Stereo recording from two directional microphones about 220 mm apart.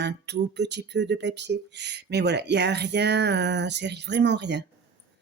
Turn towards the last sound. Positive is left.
turn(degrees=-50)  # may be behind; listen again after turning